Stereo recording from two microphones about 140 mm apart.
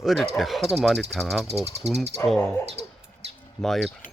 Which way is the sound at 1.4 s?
50° right (ahead or behind).